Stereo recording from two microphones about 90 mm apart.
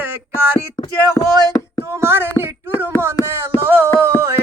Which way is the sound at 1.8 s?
30° right (ahead or behind).